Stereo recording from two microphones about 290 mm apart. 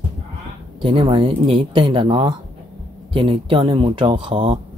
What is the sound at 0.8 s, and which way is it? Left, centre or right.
Speech, centre.